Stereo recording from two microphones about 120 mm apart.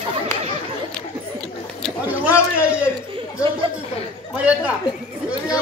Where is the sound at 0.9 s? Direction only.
5° left (ahead or behind).